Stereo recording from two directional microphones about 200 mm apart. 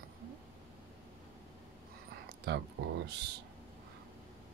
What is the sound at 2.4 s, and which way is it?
Speech, 55° right (ahead or behind).